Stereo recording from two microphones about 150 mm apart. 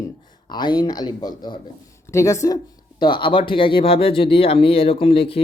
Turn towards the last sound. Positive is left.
turn(degrees=40)  # may be behind; listen again after turning